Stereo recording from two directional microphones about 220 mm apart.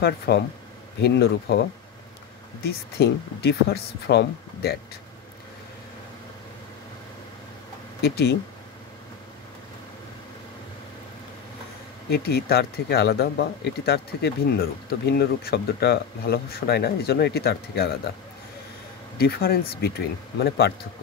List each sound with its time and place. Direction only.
0.0 s speech: 45° left (ahead or behind)
8.0 s speech: 50° left (ahead or behind)
12.1 s speech: 45° left (ahead or behind)
19.1 s speech: 45° left (ahead or behind)